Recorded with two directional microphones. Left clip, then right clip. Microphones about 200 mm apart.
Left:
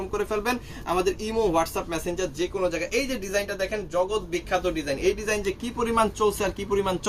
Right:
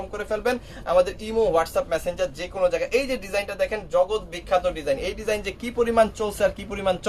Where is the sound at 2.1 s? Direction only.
30° right (ahead or behind).